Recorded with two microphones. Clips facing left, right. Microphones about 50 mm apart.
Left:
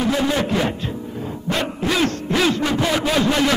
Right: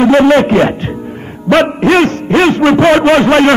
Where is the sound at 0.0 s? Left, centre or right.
Right.